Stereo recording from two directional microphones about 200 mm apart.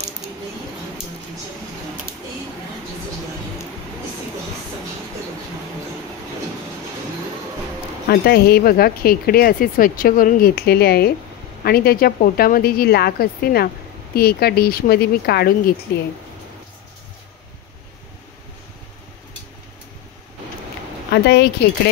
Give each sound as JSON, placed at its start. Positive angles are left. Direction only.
{"t": 8.1, "sound": "speech", "side_deg": 50}
{"t": 21.1, "sound": "speech", "side_deg": 55}